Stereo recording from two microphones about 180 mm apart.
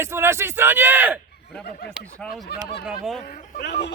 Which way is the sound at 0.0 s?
15° right (ahead or behind).